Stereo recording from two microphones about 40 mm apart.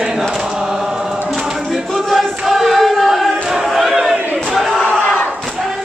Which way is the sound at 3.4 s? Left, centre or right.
Centre.